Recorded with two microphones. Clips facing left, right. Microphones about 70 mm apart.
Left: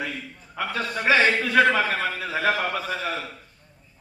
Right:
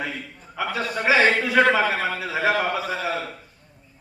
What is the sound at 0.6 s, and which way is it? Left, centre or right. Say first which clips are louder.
Speech: right 1 dB; centre.